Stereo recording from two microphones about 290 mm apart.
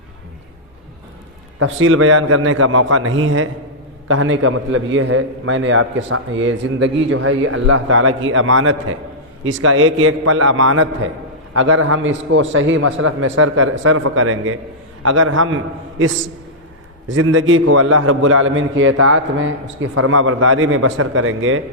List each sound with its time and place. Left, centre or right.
1.5 s a man's voice: right
17.1 s a man's voice: right